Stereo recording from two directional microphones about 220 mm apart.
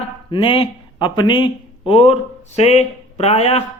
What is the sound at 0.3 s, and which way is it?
Speech, 25° left (ahead or behind).